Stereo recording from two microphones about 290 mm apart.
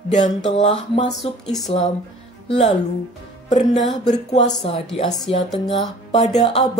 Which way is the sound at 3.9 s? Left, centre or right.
Left.